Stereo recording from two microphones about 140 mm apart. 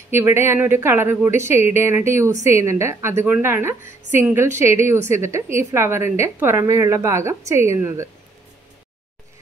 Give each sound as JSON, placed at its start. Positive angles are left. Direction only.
{"t": 0.1, "sound": "a woman's voice", "side_deg": -15}